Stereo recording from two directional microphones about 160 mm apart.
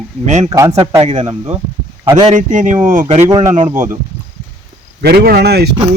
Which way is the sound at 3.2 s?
20° right (ahead or behind).